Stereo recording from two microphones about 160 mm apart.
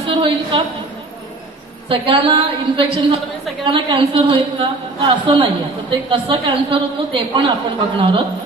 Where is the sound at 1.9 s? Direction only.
35° right (ahead or behind).